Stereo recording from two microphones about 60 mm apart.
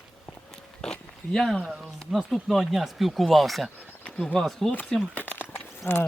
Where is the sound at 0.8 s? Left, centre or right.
Centre.